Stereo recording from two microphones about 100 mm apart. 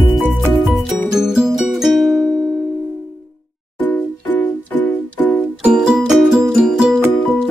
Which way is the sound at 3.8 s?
20° left (ahead or behind).